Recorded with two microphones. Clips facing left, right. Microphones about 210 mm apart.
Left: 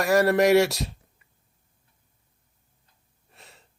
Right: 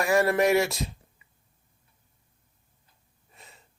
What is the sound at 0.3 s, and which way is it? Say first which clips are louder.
Speech: left 4 dB; 75° left (ahead or behind).